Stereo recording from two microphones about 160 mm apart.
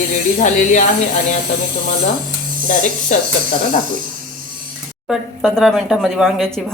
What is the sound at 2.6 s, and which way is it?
Speech, 50° left (ahead or behind).